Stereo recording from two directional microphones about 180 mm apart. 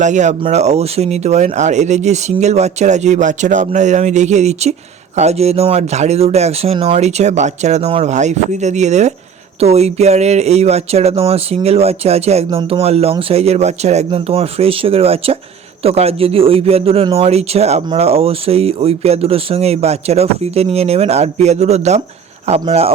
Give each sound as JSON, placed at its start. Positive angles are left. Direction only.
{"t": 0.0, "sound": "speech", "side_deg": -40}